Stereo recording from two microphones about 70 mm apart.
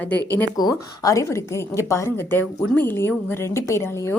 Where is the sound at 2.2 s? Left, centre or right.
Left.